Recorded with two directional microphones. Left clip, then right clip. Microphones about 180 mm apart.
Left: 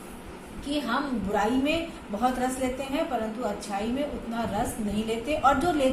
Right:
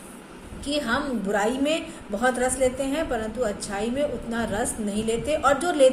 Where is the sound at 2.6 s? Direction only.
45° right (ahead or behind).